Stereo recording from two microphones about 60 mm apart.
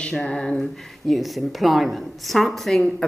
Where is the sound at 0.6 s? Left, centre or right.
Centre.